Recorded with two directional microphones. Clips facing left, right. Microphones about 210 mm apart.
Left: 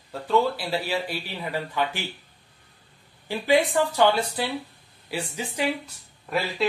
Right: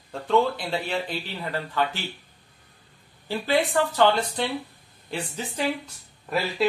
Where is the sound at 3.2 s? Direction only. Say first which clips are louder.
Left 2 dB; 15° left (ahead or behind).